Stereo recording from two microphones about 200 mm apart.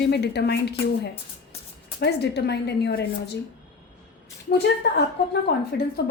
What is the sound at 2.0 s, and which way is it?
A woman's voice, 55° left (ahead or behind).